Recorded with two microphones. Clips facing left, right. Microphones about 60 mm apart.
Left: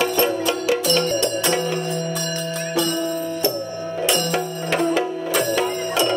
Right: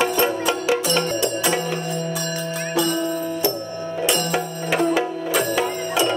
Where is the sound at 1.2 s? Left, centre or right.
Centre.